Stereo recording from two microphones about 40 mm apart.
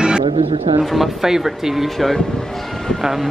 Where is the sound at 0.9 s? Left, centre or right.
Centre.